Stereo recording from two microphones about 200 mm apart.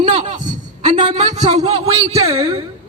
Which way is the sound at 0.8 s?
35° right (ahead or behind).